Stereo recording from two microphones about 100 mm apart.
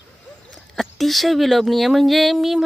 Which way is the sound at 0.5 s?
5° left (ahead or behind).